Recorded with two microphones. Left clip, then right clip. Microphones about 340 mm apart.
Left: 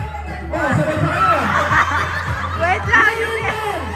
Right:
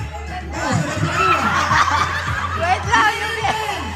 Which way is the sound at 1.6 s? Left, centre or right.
Centre.